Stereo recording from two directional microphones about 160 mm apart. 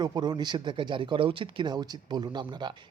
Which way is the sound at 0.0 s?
25° right (ahead or behind).